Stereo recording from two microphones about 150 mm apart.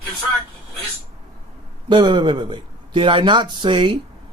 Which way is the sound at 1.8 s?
30° right (ahead or behind).